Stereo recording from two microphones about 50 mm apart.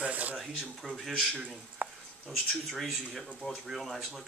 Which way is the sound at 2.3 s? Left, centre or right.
Centre.